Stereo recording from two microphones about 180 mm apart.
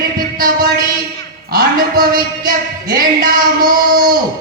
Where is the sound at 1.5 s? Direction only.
55° right (ahead or behind).